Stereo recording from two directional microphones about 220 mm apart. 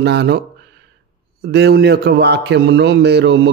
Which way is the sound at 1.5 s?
45° right (ahead or behind).